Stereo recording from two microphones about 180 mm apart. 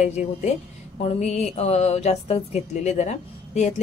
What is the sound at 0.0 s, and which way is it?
Speech, 40° left (ahead or behind).